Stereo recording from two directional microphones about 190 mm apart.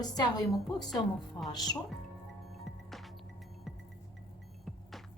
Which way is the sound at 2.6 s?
Centre (ahead or behind).